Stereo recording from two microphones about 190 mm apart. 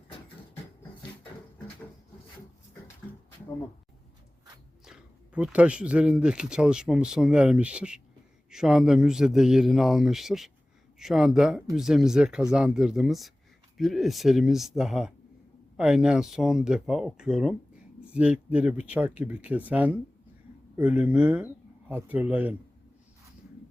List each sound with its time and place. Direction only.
4.9 s speech: 5° right (ahead or behind)